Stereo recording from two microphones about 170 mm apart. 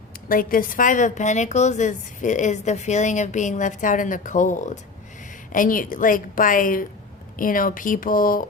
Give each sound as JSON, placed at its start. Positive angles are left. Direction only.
{"t": 0.3, "sound": "a woman's voice", "side_deg": 55}